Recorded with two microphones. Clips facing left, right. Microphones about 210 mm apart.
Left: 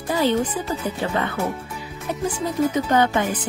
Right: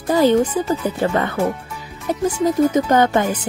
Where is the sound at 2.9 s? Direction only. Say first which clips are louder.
Right 4 dB; 45° right (ahead or behind).